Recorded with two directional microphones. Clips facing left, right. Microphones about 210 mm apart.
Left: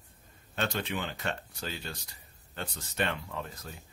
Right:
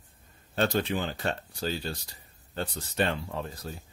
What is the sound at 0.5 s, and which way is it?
A man's voice, 35° right (ahead or behind).